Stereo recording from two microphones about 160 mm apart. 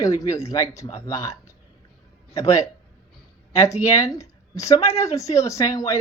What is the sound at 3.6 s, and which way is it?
Speech, 20° left (ahead or behind).